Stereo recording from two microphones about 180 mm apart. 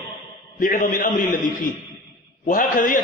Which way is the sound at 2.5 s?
50° left (ahead or behind).